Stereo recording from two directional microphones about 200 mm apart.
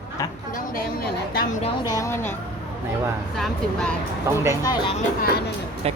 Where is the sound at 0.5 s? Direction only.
45° left (ahead or behind).